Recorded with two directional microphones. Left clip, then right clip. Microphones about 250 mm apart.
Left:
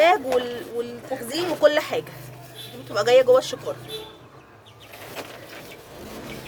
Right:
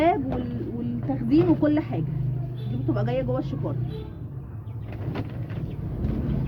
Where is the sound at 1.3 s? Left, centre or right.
Left.